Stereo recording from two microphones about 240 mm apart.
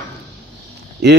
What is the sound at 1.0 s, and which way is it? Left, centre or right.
Speech, right.